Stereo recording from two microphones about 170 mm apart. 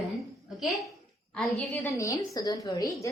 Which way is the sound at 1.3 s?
5° left (ahead or behind).